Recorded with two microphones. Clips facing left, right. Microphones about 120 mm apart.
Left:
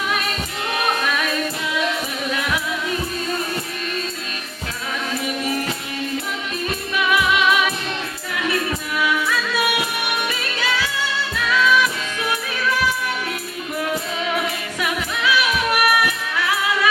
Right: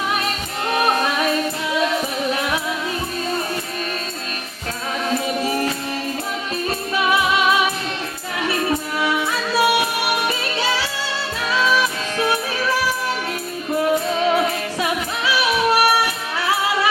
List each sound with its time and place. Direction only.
0.8 s music: 35° right (ahead or behind)
2.3 s music: 30° right (ahead or behind)
5.0 s music: 30° right (ahead or behind)
6.7 s music: 30° right (ahead or behind)